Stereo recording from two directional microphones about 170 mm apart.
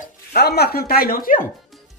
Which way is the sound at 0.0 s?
65° left (ahead or behind).